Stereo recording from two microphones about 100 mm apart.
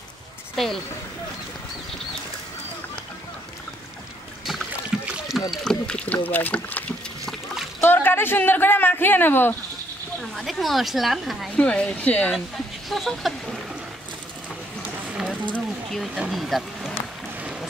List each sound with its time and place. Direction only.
0.6 s a woman's voice: centre (ahead or behind)
5.0 s rowboat: 10° right (ahead or behind)
5.5 s speech: 5° left (ahead or behind)
10.3 s a woman's voice: centre (ahead or behind)
11.5 s speech: 10° left (ahead or behind)
12.9 s a woman's voice: centre (ahead or behind)
15.0 s a sound: 5° right (ahead or behind)
16.2 s speech: centre (ahead or behind)